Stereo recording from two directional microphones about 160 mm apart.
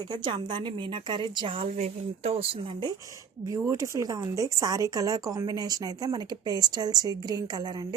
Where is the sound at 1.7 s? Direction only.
45° right (ahead or behind).